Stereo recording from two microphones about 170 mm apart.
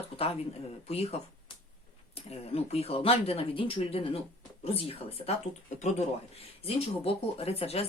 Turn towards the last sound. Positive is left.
turn(degrees=35)  # may be behind; listen again after turning